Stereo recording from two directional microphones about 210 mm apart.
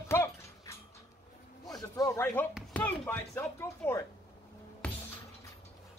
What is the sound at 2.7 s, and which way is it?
Speech, 5° left (ahead or behind).